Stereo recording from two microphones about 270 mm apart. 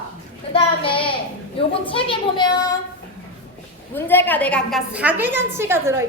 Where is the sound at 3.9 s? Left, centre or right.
Centre.